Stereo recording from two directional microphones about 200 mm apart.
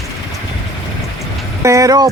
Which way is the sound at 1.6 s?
15° right (ahead or behind).